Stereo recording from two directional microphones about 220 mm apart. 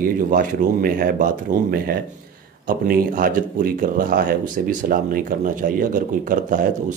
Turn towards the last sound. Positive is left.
turn(degrees=-35)  # may be behind; listen again after turning